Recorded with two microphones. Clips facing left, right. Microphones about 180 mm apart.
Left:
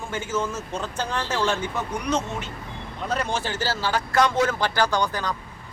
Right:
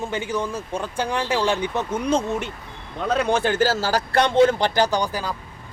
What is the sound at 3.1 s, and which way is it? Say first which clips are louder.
Speech: right 7 dB; 60° right (ahead or behind).